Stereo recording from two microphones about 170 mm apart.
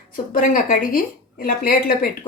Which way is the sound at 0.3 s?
50° left (ahead or behind).